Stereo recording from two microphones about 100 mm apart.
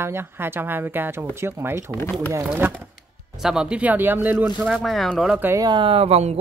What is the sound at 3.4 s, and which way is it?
Speech, 5° right (ahead or behind).